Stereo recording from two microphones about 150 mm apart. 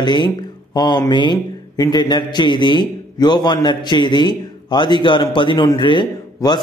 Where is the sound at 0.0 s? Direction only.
30° left (ahead or behind).